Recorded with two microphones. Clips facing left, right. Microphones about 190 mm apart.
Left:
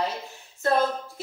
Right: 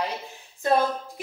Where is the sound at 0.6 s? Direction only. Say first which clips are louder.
Right 1 dB; 15° right (ahead or behind).